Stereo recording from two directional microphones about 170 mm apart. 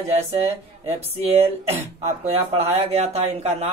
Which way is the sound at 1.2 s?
35° right (ahead or behind).